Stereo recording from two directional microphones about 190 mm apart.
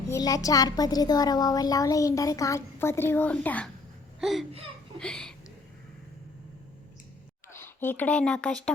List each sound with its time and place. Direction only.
0.1 s a woman's voice: 20° left (ahead or behind)
7.5 s speech: 10° left (ahead or behind)